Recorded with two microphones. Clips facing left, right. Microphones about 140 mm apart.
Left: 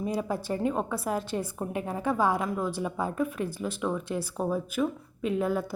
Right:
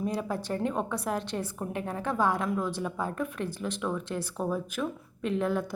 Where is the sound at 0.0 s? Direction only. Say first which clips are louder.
Left 1 dB; 10° left (ahead or behind).